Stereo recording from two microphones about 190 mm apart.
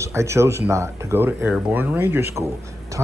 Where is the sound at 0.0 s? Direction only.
15° right (ahead or behind).